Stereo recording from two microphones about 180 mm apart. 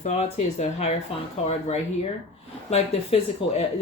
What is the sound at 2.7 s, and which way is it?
Speech, 35° left (ahead or behind).